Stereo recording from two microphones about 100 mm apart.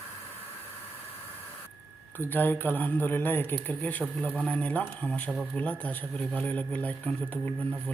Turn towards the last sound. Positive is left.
turn(degrees=15)  # may be behind; listen again after turning